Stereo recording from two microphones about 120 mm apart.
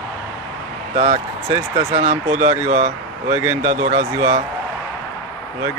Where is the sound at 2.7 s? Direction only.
80° right.